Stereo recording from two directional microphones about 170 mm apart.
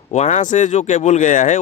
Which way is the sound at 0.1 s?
40° left (ahead or behind).